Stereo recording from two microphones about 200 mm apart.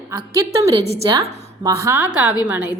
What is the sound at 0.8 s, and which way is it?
Speech, 30° right (ahead or behind).